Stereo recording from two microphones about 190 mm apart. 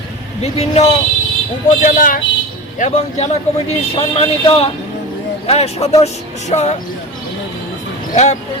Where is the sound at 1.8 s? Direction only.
45° left (ahead or behind).